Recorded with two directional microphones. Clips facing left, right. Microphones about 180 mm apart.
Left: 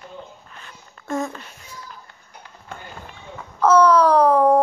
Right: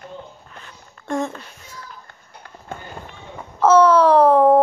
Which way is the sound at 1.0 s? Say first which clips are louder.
Right 2 dB; centre (ahead or behind).